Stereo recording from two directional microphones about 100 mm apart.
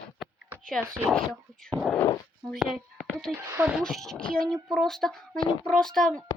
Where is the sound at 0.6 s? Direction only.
5° left (ahead or behind).